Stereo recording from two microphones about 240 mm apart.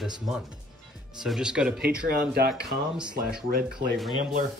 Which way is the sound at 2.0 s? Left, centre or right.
Right.